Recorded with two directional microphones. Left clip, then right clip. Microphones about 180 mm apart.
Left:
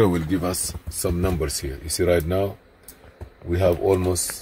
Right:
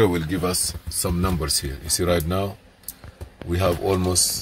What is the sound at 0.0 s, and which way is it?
Speech, 15° left (ahead or behind).